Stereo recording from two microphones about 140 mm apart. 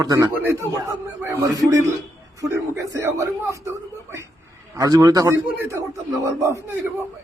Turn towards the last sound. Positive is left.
turn(degrees=-15)  # may be behind; listen again after turning